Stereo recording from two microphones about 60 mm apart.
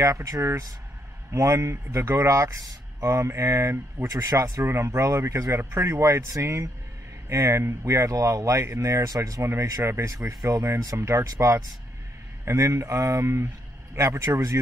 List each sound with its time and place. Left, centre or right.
0.0 s speech: right
4.6 s speech: right
5.6 s speech: right
6.2 s speech: right
9.4 s speech: right
10.1 s speech: right